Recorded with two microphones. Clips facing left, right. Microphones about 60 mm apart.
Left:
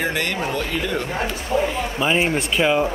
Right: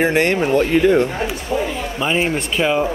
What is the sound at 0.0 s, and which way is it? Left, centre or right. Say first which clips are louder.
Speech: right 7 dB; right.